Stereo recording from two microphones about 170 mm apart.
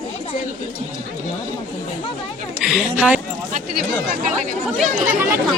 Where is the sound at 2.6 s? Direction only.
5° right (ahead or behind).